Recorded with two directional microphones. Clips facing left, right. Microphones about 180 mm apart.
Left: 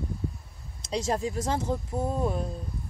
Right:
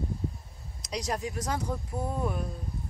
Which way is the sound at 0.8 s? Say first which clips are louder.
Left 4 dB; 25° left (ahead or behind).